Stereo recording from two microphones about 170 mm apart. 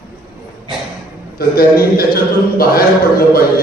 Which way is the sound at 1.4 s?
60° left (ahead or behind).